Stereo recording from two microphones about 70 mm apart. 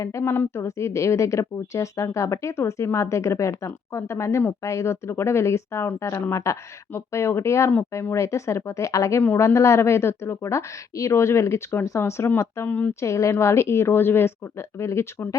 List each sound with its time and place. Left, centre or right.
0.0 s a woman's voice: left
0.3 s a woman's voice: left
12.6 s speech: left
12.9 s a woman's voice: left